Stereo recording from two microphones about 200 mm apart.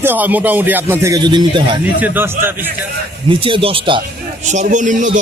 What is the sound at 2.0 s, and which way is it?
Speech, 10° right (ahead or behind).